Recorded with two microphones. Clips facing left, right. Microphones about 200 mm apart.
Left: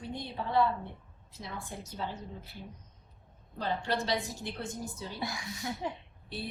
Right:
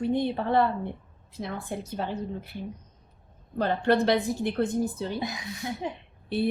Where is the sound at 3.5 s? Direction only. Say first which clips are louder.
Right 9 dB; 60° right (ahead or behind).